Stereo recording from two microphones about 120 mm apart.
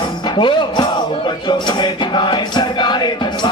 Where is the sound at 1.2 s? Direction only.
40° left (ahead or behind).